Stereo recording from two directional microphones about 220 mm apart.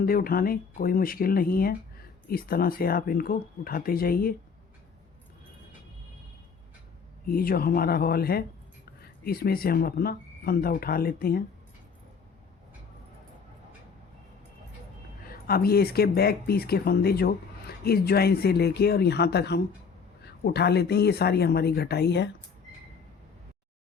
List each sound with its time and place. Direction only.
0.0 s speech: 40° left (ahead or behind)
7.3 s speech: 40° left (ahead or behind)
15.3 s speech: 45° left (ahead or behind)